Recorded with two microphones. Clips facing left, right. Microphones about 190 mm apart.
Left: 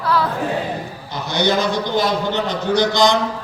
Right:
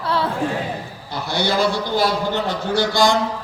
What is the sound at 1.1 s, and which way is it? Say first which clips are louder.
A man's voice: left 3 dB; 20° left (ahead or behind).